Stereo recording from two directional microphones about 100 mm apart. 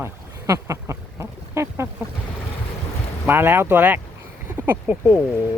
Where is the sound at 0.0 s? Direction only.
30° right (ahead or behind).